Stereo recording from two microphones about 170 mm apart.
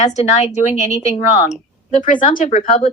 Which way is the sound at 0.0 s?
40° left (ahead or behind).